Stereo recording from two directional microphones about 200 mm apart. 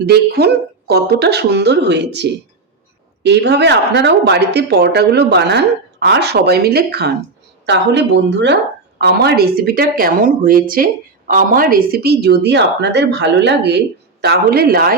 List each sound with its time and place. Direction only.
0.0 s a woman's voice: 55° right (ahead or behind)